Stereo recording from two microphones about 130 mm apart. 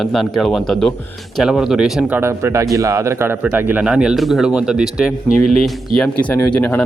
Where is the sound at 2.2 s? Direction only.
20° right (ahead or behind).